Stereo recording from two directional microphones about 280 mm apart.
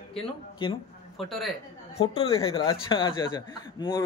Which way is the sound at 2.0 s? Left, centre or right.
Centre.